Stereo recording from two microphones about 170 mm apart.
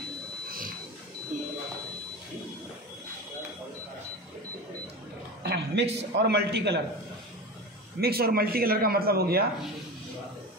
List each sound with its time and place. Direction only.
0.5 s wild animals: 55° right (ahead or behind)
5.4 s a sound: 80° right
6.1 s a man's voice: 70° right (ahead or behind)
8.0 s a man's voice: 65° right (ahead or behind)